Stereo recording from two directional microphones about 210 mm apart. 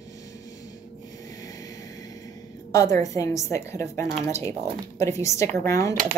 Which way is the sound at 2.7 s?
15° left (ahead or behind).